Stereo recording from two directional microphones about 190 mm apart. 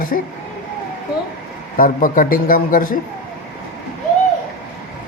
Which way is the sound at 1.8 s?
45° left (ahead or behind).